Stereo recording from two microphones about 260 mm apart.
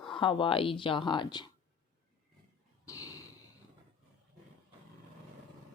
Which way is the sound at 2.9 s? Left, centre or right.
Centre.